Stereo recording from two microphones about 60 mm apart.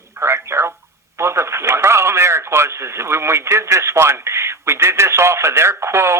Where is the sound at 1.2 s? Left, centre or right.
Right.